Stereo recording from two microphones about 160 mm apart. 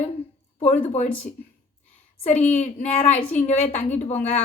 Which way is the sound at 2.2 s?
45° left (ahead or behind).